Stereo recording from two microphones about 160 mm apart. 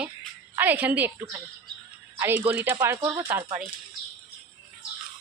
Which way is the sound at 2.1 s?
15° right (ahead or behind).